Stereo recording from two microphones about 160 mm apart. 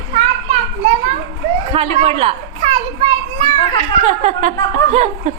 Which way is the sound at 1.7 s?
35° right (ahead or behind).